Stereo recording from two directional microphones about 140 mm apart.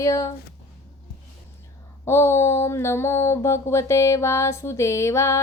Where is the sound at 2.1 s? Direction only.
20° left (ahead or behind).